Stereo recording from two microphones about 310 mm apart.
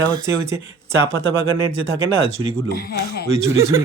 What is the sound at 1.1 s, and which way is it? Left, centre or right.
Speech, right.